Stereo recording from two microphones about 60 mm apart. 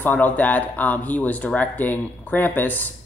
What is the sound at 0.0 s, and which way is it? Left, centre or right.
Speech, left.